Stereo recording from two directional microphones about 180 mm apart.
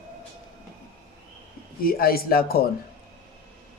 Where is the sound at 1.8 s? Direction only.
55° left (ahead or behind).